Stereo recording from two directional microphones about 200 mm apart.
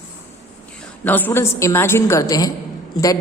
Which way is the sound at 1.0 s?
10° left (ahead or behind).